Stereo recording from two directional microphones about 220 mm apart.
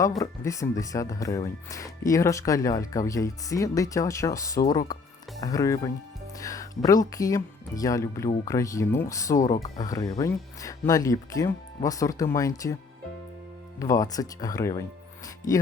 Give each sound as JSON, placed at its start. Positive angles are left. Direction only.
{"t": 0.2, "sound": "speech", "side_deg": 15}
{"t": 13.7, "sound": "speech", "side_deg": 15}